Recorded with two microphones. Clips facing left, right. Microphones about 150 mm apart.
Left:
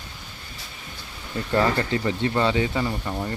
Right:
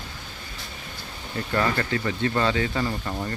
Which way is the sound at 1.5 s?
25° left (ahead or behind).